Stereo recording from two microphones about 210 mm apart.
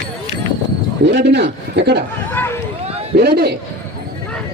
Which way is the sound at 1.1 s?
55° right (ahead or behind).